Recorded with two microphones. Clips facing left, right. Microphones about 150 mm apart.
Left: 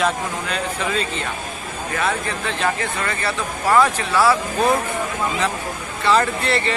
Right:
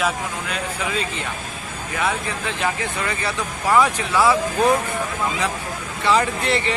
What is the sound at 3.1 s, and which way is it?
Speech, 15° right (ahead or behind).